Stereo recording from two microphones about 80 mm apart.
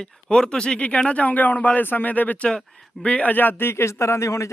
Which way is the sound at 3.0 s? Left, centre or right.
Centre.